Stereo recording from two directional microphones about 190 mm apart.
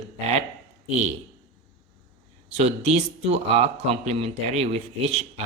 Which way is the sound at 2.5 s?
35° right (ahead or behind).